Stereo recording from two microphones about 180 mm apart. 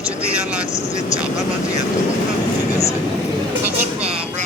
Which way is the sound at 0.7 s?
40° left (ahead or behind).